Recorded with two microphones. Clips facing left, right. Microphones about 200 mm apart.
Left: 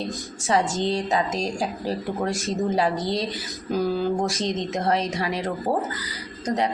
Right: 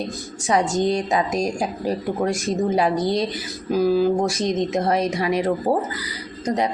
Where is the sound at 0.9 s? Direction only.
15° right (ahead or behind).